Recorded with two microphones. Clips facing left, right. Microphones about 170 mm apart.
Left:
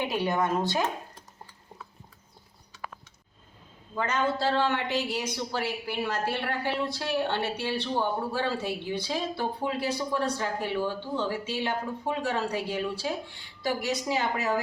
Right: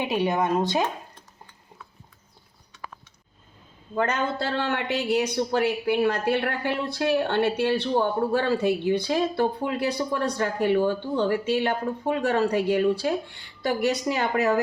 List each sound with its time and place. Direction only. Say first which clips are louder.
0.0 s speech: right 3 dB; 20° right (ahead or behind)
3.9 s a man's voice: right 3 dB; 60° right (ahead or behind)